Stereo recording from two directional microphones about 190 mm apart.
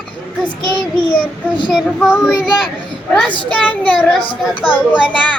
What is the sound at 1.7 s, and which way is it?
A child's voice, centre (ahead or behind).